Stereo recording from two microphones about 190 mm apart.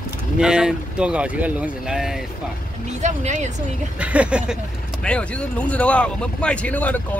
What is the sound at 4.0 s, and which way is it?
Speech, 5° right (ahead or behind).